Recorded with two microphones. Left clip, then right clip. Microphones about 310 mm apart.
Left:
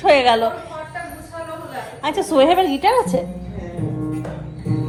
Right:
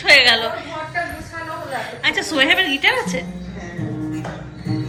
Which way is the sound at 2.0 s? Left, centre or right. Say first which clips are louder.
Left 2 dB; centre.